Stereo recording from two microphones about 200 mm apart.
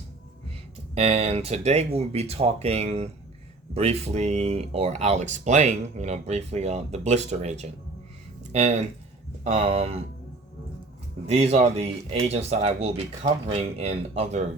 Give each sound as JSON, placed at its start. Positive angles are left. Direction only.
{"t": 0.9, "sound": "speech", "side_deg": -30}
{"t": 11.3, "sound": "speech", "side_deg": -30}